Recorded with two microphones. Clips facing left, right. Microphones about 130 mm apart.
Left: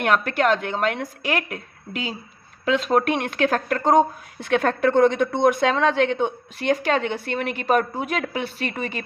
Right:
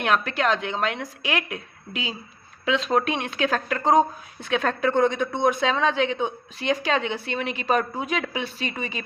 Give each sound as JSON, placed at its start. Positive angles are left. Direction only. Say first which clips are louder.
{"t": 0.0, "sound": "a woman's voice", "louder": "left 3 dB", "side_deg": 50}